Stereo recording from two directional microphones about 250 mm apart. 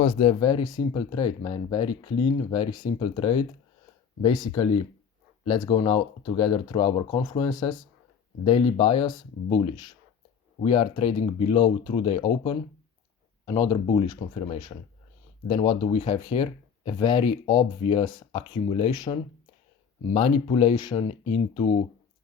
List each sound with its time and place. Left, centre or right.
0.0 s speech: left